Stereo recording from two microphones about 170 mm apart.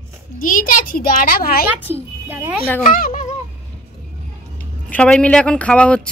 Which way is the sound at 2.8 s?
55° left (ahead or behind).